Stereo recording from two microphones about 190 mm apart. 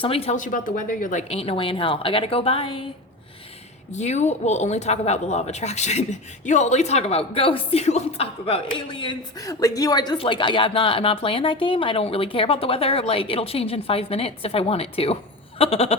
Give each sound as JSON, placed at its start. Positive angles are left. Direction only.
{"t": 0.0, "sound": "speech", "side_deg": 30}
{"t": 3.9, "sound": "speech", "side_deg": 35}